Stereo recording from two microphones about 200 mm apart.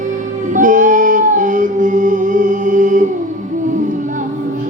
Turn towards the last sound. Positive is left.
turn(degrees=-40)  # may be behind; listen again after turning